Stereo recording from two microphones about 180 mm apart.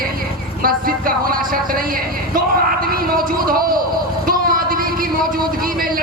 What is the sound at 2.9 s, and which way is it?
Speech, 55° right (ahead or behind).